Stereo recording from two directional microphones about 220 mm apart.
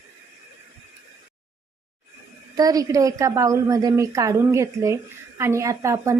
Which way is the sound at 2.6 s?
15° right (ahead or behind).